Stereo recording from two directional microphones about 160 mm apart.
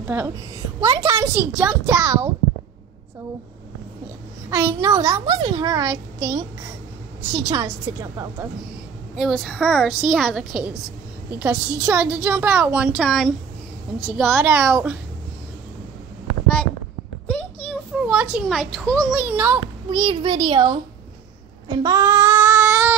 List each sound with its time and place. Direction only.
0.0 s a child's voice: 15° right (ahead or behind)
4.5 s a child's voice: 15° right (ahead or behind)
7.2 s a child's voice: 20° right (ahead or behind)
9.1 s a woman's voice: centre (ahead or behind)
18.0 s a child's voice: 5° right (ahead or behind)
19.2 s a woman's voice: 10° right (ahead or behind)
19.9 s a child's voice: 30° right (ahead or behind)
21.6 s child singing: 25° right (ahead or behind)